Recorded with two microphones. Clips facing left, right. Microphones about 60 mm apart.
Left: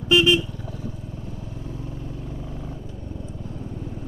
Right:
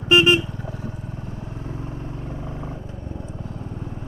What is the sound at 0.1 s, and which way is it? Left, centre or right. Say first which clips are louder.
Vehicle: right 2 dB; right.